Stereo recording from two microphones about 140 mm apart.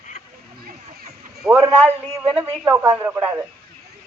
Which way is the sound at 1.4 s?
5° right (ahead or behind).